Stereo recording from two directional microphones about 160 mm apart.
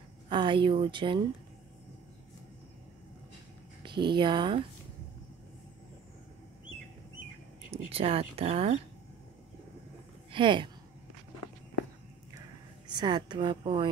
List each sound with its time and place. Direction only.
0.3 s speech: 30° right (ahead or behind)
3.8 s speech: 30° right (ahead or behind)
7.7 s speech: 35° right (ahead or behind)
10.3 s speech: 30° right (ahead or behind)
12.4 s a sound: 25° right (ahead or behind)